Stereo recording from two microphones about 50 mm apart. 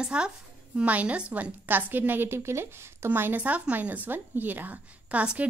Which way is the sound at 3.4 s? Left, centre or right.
Right.